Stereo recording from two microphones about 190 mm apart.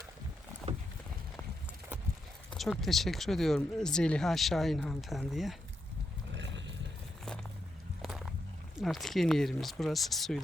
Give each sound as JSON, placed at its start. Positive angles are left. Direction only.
{"t": 2.5, "sound": "speech", "side_deg": 0}
{"t": 6.3, "sound": "horse", "side_deg": -70}
{"t": 8.0, "sound": "walk", "side_deg": 0}
{"t": 8.8, "sound": "speech", "side_deg": 0}